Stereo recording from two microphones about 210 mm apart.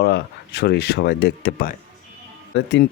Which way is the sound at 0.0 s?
50° left (ahead or behind).